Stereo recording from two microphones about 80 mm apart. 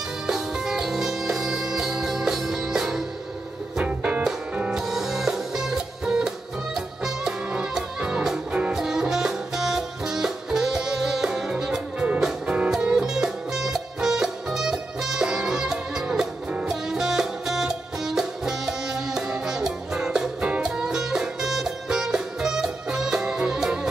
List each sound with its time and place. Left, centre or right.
0.3 s music: centre
3.7 s music: centre